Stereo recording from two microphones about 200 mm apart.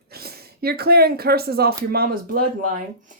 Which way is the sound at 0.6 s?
50° right (ahead or behind).